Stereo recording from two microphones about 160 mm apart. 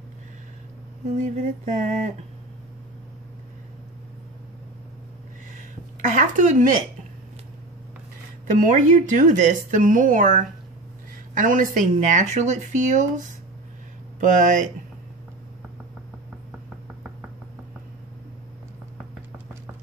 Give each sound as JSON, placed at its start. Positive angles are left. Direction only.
{"t": 1.1, "sound": "speech", "side_deg": -45}
{"t": 5.9, "sound": "speech", "side_deg": -50}
{"t": 8.6, "sound": "speech", "side_deg": -50}